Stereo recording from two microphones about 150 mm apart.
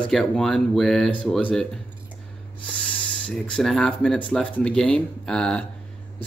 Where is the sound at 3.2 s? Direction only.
5° left (ahead or behind).